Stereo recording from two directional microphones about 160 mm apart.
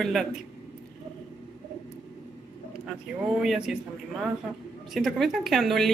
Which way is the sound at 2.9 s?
5° right (ahead or behind).